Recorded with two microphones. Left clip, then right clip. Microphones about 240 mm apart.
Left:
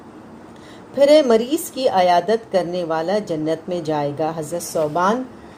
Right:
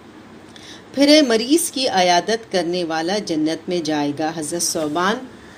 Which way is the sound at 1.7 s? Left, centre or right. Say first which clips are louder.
Left 3 dB; right.